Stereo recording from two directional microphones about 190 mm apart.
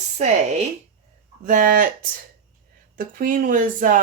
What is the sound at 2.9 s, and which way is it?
Speech, 45° right (ahead or behind).